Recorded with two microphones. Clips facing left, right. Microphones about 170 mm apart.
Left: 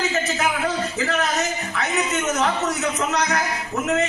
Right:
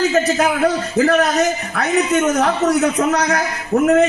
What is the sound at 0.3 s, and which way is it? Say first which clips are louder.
Speech: right 7 dB; 60° right (ahead or behind).